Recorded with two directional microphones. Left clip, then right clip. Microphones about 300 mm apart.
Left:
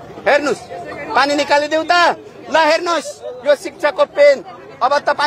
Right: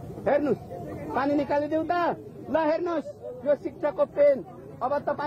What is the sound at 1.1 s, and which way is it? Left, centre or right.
A man's voice, centre.